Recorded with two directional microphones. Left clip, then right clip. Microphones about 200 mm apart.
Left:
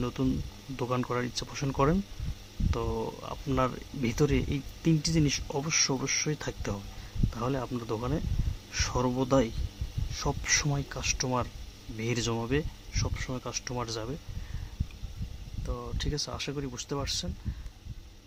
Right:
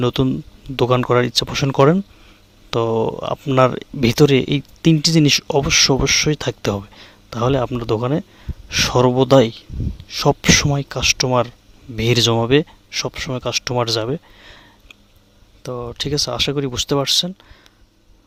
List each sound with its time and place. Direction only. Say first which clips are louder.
0.0 s speech: right 13 dB; 45° right (ahead or behind)
15.6 s speech: right 13 dB; 40° right (ahead or behind)